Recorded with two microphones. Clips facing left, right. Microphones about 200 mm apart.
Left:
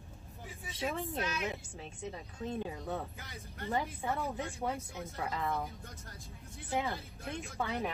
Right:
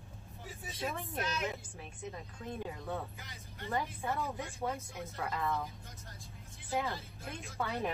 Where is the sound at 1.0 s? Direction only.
15° left (ahead or behind).